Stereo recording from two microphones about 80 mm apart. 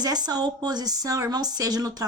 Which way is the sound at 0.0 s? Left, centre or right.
Right.